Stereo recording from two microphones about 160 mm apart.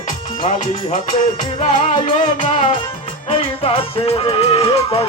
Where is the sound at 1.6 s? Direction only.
50° left (ahead or behind).